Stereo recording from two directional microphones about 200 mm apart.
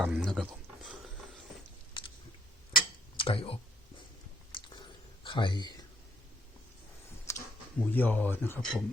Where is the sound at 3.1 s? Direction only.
25° left (ahead or behind).